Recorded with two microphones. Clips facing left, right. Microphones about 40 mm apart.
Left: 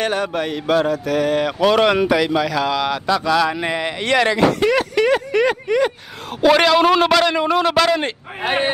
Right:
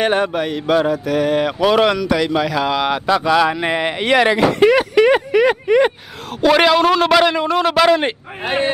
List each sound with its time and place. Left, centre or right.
0.0 s speech: right
0.3 s a man's voice: centre
2.3 s speech: centre
6.4 s a man's voice: centre
7.1 s a man's voice: centre
7.8 s speech: centre